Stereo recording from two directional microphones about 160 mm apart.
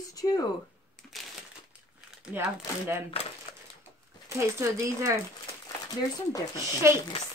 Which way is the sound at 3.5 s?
35° left (ahead or behind).